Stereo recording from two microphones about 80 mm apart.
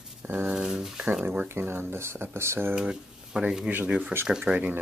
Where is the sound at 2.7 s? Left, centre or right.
Centre.